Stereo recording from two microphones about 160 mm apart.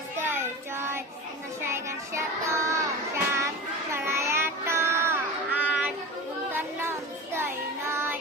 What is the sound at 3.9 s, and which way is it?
Child singing, 15° right (ahead or behind).